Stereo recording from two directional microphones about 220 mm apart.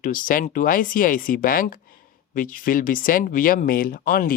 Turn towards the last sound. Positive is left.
turn(degrees=40)  # may be behind; listen again after turning